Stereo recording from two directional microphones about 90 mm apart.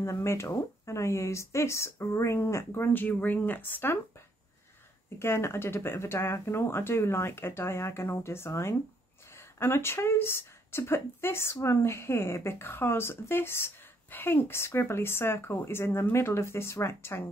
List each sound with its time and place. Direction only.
0.0 s speech: 30° left (ahead or behind)
5.2 s speech: 30° left (ahead or behind)